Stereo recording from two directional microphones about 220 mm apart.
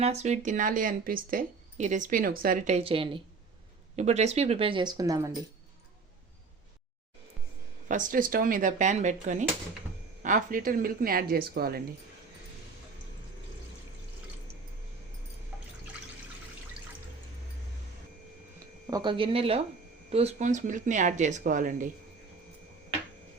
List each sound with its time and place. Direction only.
0.0 s speech: 30° right (ahead or behind)
7.9 s speech: 35° right (ahead or behind)
18.9 s speech: 20° right (ahead or behind); by 21.8 s 35° right (ahead or behind)